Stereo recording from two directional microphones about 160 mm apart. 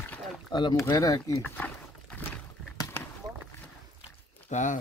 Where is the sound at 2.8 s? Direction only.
15° left (ahead or behind).